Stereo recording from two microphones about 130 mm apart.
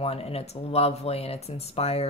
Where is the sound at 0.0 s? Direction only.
50° left (ahead or behind).